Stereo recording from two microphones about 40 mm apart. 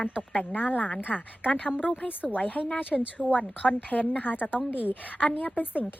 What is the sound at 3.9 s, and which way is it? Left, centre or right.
Speech, left.